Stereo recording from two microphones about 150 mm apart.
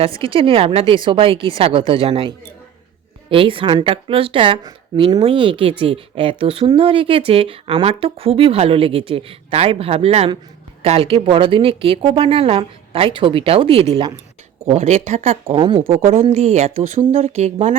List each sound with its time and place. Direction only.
0.0 s speech: 35° right (ahead or behind)